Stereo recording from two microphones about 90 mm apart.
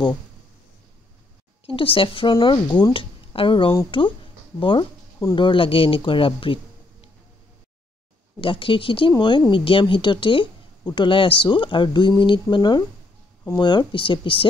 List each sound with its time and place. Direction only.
1.7 s speech: 80° left
2.3 s speech: 55° left (ahead or behind); by 7.1 s 80° left
8.4 s speech: 70° left (ahead or behind)
10.8 s speech: 55° left (ahead or behind); by 14.5 s 70° left (ahead or behind)